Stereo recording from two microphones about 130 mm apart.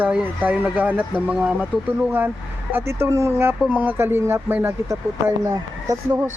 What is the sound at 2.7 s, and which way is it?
Speech, 20° right (ahead or behind).